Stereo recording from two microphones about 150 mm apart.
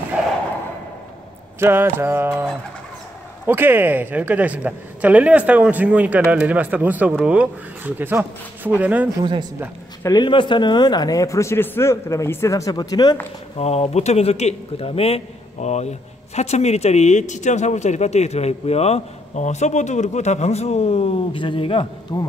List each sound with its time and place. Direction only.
1.6 s speech: 15° right (ahead or behind)
10.0 s a man's voice: 30° left (ahead or behind)
13.6 s a man's voice: 45° left (ahead or behind)
22.1 s a man's voice: 20° left (ahead or behind)